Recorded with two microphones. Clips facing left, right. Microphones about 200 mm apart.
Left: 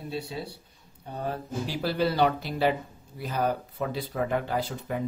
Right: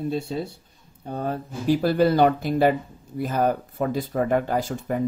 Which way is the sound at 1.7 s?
50° right (ahead or behind).